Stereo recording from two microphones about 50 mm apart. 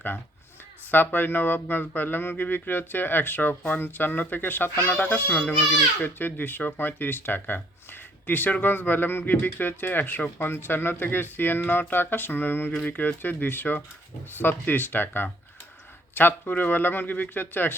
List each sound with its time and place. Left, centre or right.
0.9 s a child's voice: left